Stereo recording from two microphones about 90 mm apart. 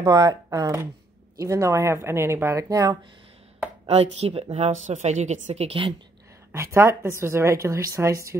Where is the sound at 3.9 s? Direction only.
90° right.